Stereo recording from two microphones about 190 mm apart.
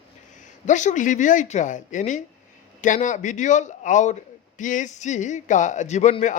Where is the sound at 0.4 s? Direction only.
40° left (ahead or behind).